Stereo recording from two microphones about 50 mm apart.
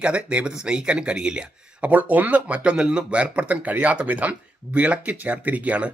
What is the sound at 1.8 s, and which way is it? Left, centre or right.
Speech, right.